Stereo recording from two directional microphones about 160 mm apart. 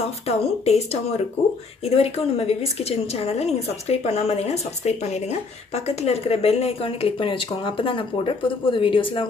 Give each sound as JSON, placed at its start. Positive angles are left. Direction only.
{"t": 0.3, "sound": "a woman's voice", "side_deg": 45}